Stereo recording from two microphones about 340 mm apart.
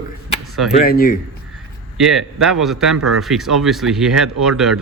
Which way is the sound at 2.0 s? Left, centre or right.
Centre.